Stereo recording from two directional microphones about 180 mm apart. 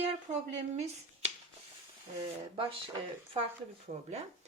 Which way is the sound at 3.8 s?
35° right (ahead or behind).